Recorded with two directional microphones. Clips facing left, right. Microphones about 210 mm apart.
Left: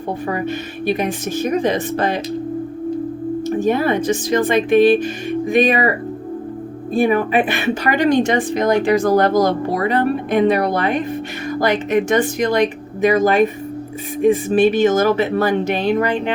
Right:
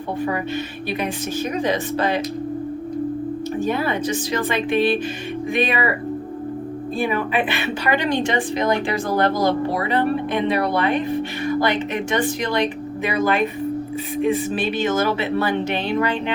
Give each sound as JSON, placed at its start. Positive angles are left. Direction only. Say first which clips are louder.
{"t": 3.7, "sound": "speech", "louder": "left 6 dB", "side_deg": 45}
{"t": 6.9, "sound": "speech", "louder": "left 7 dB", "side_deg": 50}